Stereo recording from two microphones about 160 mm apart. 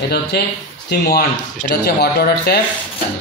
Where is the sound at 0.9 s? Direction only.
90° left.